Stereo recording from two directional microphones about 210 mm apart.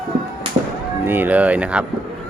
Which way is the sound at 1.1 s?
10° right (ahead or behind).